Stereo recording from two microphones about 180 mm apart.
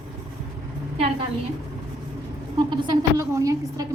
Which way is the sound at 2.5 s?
25° right (ahead or behind).